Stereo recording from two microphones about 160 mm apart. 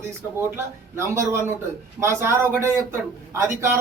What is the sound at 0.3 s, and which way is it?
A man's voice, 15° right (ahead or behind).